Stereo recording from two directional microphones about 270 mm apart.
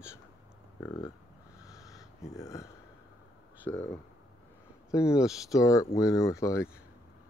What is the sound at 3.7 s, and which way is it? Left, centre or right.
Speech, centre.